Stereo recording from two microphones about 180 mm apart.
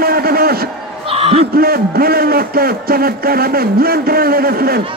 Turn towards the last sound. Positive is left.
turn(degrees=-55)  # may be behind; listen again after turning